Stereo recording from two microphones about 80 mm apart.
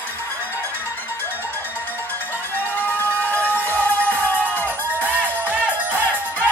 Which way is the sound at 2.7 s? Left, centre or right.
Left.